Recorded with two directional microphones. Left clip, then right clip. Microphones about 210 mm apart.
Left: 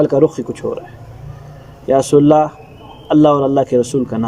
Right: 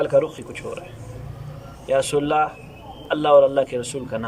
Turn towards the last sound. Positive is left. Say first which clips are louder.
# left 11 dB
turn(degrees=30)  # may be behind; listen again after turning